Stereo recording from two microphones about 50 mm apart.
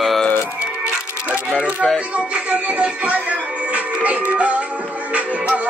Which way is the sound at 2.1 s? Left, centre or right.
Right.